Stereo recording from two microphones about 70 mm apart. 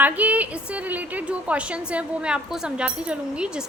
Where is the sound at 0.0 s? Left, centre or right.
Right.